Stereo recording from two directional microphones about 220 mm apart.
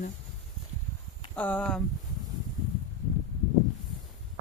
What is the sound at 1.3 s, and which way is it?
Speech, 5° left (ahead or behind).